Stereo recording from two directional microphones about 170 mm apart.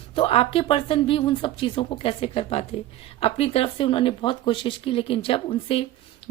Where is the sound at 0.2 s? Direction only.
35° left (ahead or behind).